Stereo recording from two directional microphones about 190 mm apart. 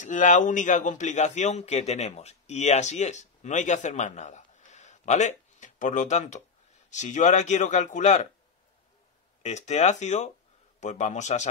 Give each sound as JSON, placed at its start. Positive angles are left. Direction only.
{"t": 0.0, "sound": "a man's voice", "side_deg": 40}
{"t": 9.4, "sound": "speech", "side_deg": 35}